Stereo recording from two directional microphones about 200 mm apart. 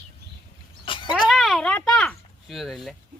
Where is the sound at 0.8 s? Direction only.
25° left (ahead or behind).